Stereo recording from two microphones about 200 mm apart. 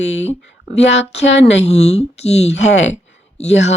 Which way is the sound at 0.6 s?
60° left (ahead or behind).